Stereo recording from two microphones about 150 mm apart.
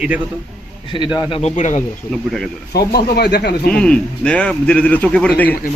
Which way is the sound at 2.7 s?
90° left.